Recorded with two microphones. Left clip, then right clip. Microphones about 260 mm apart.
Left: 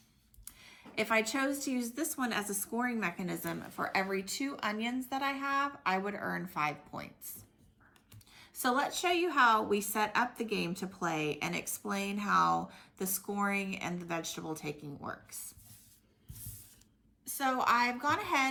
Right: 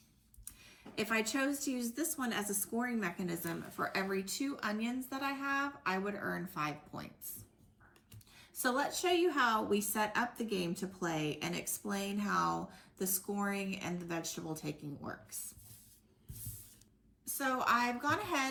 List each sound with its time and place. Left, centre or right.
0.6 s a woman's voice: left
8.5 s a woman's voice: left
17.2 s a woman's voice: left